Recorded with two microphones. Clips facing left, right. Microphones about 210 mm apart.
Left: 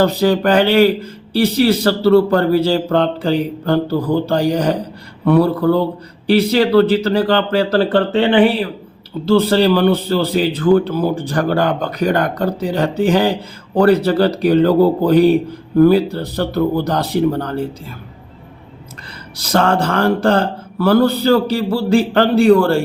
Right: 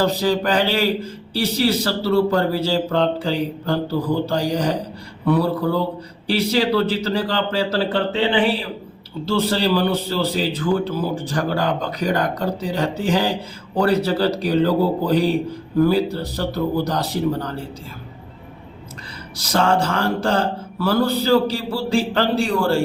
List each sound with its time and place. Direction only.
0.0 s mantra: 60° left (ahead or behind)
19.4 s mantra: 55° left (ahead or behind)